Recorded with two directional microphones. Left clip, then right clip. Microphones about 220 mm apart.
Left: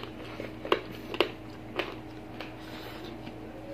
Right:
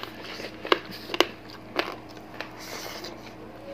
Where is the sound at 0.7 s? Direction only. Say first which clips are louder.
Right 5 dB; 40° right (ahead or behind).